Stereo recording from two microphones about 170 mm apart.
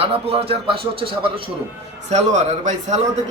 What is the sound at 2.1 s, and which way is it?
A man's voice, 45° right (ahead or behind).